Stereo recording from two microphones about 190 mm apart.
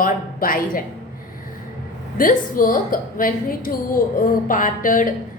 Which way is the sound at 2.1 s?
45° left (ahead or behind).